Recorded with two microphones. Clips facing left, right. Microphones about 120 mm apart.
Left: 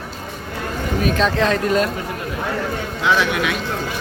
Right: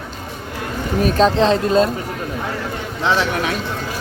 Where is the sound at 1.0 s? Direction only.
35° right (ahead or behind).